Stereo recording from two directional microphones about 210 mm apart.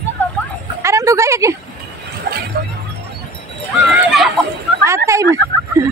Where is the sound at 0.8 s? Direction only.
15° right (ahead or behind).